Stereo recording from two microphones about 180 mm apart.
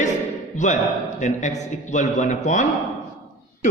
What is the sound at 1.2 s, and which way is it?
A man's voice, 40° left (ahead or behind).